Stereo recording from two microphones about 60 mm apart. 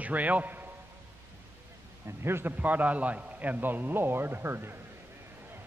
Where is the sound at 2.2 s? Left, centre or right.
Right.